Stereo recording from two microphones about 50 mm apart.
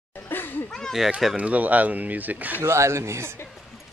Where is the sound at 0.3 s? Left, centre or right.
Left.